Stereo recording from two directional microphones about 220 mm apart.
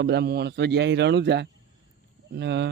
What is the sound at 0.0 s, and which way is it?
Speech, 50° right (ahead or behind).